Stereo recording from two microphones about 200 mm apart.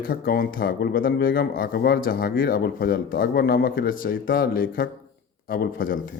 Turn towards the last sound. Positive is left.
turn(degrees=45)  # may be behind; listen again after turning